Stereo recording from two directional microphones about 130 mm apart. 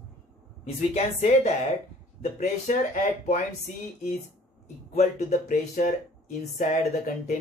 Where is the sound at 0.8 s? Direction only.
60° left (ahead or behind).